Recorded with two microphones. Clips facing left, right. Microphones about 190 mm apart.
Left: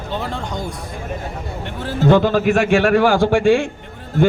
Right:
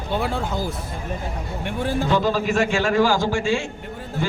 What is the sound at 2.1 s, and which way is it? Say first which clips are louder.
A man's voice: left 10 dB; 55° left (ahead or behind).